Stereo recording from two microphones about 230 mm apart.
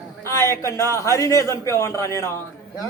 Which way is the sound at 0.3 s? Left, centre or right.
Centre.